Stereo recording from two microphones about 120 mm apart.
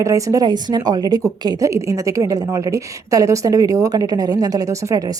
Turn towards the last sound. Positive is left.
turn(degrees=-30)  # may be behind; listen again after turning